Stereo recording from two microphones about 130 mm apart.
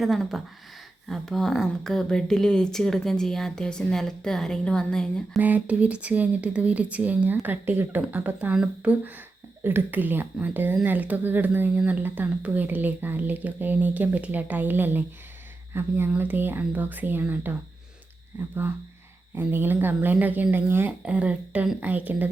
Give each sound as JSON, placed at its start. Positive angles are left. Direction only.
{"t": 0.0, "sound": "speech", "side_deg": 0}
{"t": 5.4, "sound": "speech", "side_deg": -10}